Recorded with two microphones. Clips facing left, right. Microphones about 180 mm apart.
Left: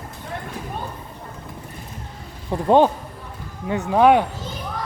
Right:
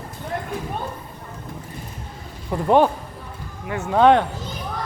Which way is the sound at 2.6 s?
20° left (ahead or behind).